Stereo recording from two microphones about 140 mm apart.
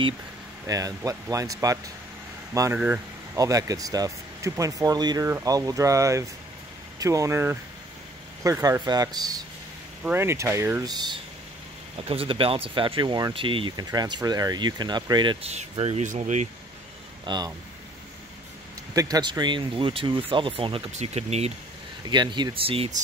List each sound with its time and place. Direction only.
0.7 s speech: 25° right (ahead or behind)
10.0 s speech: 15° right (ahead or behind)
12.0 s speech: 40° right (ahead or behind)
15.4 s speech: 50° right (ahead or behind)
17.3 s speech: 35° right (ahead or behind)
18.9 s speech: 25° right (ahead or behind)
20.9 s speech: 50° right (ahead or behind)
22.1 s speech: 30° right (ahead or behind)